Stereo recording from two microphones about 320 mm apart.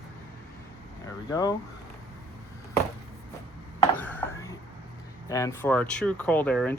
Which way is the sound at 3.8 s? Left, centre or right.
Centre.